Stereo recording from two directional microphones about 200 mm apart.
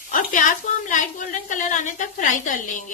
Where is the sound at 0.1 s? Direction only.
40° left (ahead or behind).